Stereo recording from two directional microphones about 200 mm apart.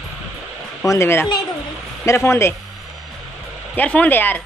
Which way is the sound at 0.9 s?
10° left (ahead or behind).